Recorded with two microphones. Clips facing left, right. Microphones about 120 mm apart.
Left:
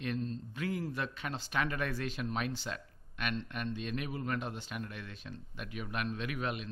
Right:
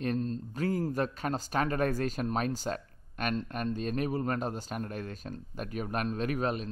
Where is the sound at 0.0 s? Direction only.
40° right (ahead or behind).